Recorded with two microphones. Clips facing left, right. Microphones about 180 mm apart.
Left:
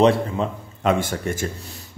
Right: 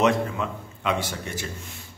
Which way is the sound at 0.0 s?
30° left (ahead or behind).